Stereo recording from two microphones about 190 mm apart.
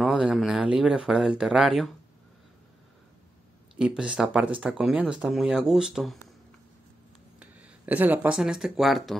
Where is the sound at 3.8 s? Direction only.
5° right (ahead or behind).